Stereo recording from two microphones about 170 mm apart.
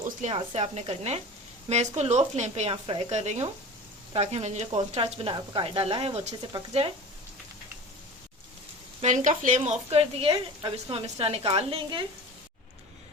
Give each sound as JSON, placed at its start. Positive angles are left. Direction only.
{"t": 0.2, "sound": "speech", "side_deg": -35}
{"t": 9.0, "sound": "speech", "side_deg": -45}